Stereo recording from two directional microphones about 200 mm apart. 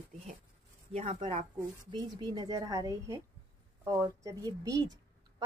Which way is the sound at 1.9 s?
20° right (ahead or behind).